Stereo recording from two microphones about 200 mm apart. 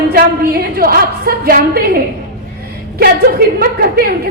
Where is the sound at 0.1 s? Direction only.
50° right (ahead or behind).